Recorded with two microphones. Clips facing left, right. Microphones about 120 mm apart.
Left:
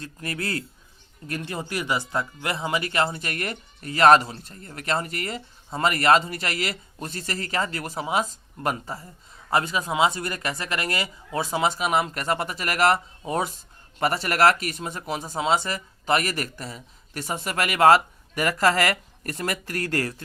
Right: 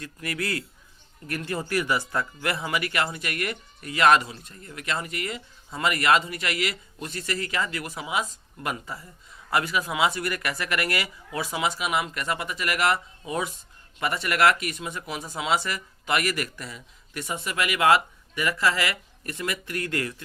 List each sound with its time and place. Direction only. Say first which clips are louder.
0.0 s speech: even; 30° left (ahead or behind)